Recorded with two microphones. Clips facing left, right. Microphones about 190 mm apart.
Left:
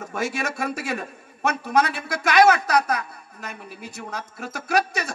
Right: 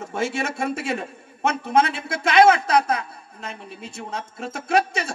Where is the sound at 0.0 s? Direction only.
25° right (ahead or behind).